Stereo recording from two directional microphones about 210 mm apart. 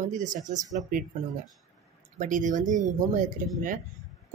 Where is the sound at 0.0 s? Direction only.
35° right (ahead or behind).